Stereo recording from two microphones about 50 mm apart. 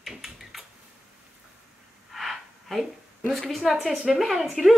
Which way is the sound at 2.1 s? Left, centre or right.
Centre.